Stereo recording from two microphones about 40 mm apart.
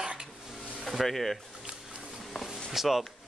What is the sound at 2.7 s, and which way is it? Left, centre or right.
Speech, centre.